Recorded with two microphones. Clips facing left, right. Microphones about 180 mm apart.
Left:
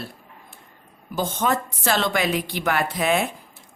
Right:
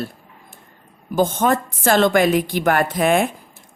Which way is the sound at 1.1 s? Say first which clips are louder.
Right 6 dB; 50° right (ahead or behind).